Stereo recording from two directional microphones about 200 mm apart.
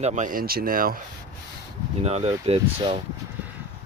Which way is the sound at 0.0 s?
35° right (ahead or behind).